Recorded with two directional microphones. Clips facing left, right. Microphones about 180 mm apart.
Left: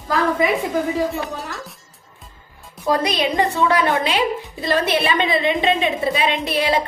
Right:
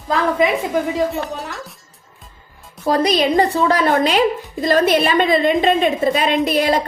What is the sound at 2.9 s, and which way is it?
A woman's voice, 35° right (ahead or behind).